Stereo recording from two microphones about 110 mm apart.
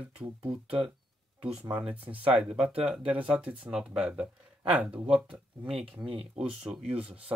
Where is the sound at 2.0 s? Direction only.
50° right (ahead or behind).